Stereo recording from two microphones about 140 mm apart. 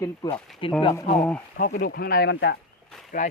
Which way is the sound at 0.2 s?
30° left (ahead or behind).